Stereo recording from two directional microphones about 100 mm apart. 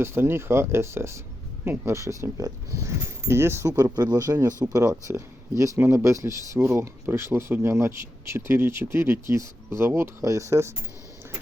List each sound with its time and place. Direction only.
0.0 s speech: 25° right (ahead or behind)